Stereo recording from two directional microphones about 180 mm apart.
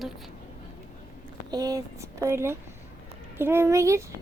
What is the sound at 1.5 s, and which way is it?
Speech, 20° right (ahead or behind).